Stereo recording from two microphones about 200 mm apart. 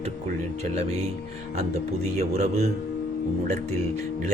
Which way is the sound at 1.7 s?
35° right (ahead or behind).